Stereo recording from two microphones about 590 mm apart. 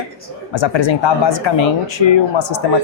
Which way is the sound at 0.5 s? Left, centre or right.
Left.